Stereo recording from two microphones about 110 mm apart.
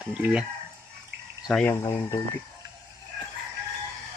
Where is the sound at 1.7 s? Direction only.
35° left (ahead or behind).